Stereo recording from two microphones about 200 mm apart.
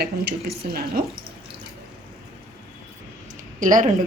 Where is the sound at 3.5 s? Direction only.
40° right (ahead or behind).